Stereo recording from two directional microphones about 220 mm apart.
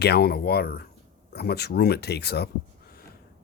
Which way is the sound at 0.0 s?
45° left (ahead or behind).